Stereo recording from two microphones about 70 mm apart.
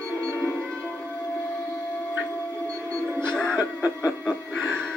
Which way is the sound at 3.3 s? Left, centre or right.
Centre.